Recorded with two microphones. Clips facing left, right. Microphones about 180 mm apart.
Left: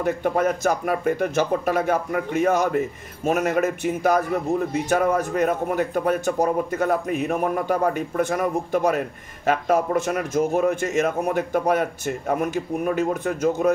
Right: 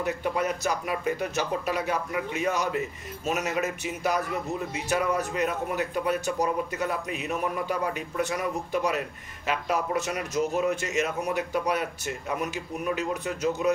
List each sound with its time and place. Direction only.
0.0 s speech: 50° left (ahead or behind)